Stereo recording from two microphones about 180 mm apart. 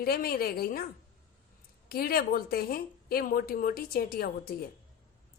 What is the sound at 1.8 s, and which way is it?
A woman's voice, 55° left (ahead or behind).